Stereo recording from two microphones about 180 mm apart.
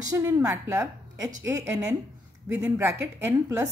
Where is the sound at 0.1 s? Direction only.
15° right (ahead or behind).